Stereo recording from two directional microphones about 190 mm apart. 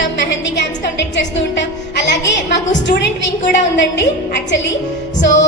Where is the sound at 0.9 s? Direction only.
70° left (ahead or behind).